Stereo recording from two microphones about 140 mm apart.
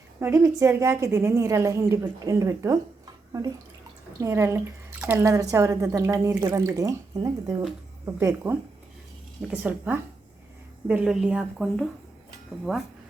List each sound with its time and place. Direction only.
0.2 s a woman's voice: 20° right (ahead or behind)
4.2 s a woman's voice: 20° right (ahead or behind)